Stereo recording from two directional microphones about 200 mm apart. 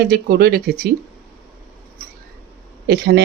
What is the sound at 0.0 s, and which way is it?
Speech, 50° right (ahead or behind).